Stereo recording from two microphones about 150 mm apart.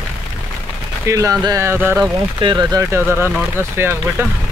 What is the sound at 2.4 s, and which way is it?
Speech, 30° right (ahead or behind).